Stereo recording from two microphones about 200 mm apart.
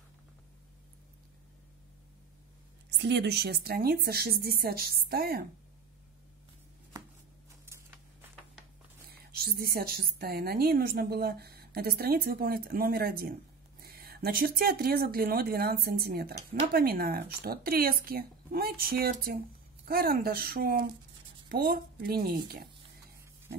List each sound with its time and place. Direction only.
2.9 s a woman's voice: 60° right (ahead or behind)
7.6 s a sound: 10° right (ahead or behind)
9.1 s a woman's voice: 50° right (ahead or behind)